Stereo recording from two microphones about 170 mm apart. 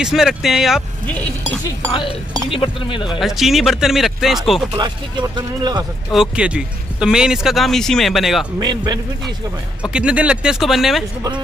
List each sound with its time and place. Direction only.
0.0 s speech: centre (ahead or behind)
2.5 s speech: 30° left (ahead or behind)
3.2 s speech: centre (ahead or behind)
4.7 s speech: 25° right (ahead or behind)
6.1 s speech: 5° right (ahead or behind)
8.5 s speech: 25° right (ahead or behind)
9.9 s speech: 5° right (ahead or behind)